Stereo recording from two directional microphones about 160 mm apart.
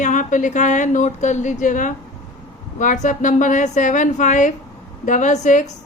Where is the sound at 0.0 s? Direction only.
50° left (ahead or behind).